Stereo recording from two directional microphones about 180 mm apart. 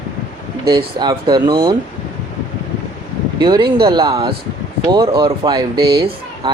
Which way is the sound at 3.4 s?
25° right (ahead or behind).